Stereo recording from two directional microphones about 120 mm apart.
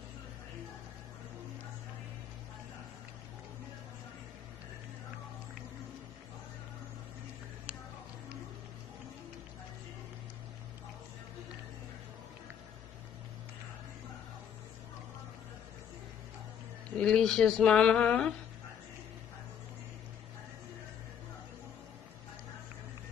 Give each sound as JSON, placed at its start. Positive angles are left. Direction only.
{"t": 16.9, "sound": "speech", "side_deg": 5}